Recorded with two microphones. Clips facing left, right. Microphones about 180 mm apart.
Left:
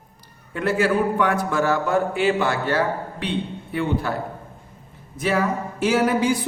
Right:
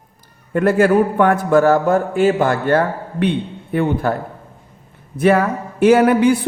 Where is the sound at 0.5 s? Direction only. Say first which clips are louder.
Right 7 dB; 50° right (ahead or behind).